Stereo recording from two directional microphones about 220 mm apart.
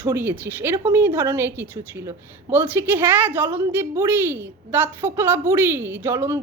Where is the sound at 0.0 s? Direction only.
10° right (ahead or behind).